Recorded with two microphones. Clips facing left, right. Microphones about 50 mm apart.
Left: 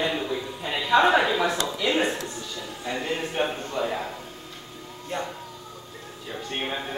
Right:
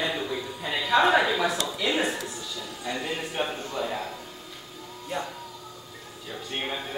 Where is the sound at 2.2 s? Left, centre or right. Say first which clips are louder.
Left 1 dB; centre.